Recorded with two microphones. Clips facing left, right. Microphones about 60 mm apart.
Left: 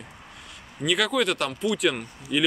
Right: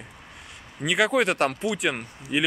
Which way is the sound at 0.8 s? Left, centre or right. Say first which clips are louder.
Right 2 dB; centre.